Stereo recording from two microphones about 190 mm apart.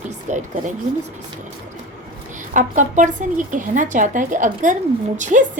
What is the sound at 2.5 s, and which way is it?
Speech, 40° right (ahead or behind).